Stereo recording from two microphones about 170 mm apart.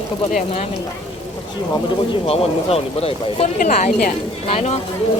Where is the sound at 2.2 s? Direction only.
35° left (ahead or behind).